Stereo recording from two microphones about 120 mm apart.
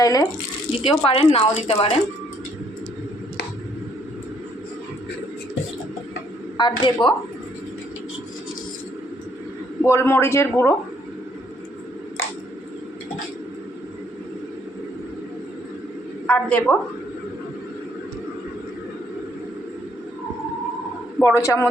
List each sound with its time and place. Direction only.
0.0 s speech: 30° left (ahead or behind)
0.8 s speech: 50° left (ahead or behind)
6.6 s speech: 40° left (ahead or behind)
9.8 s speech: 20° left (ahead or behind)
16.2 s a woman's voice: 10° left (ahead or behind)
21.2 s speech: 25° left (ahead or behind)